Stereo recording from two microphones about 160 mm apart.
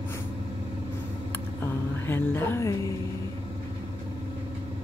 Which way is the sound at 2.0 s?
15° left (ahead or behind).